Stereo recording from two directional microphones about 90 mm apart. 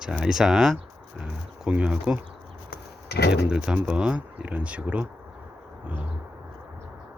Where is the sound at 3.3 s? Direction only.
10° right (ahead or behind).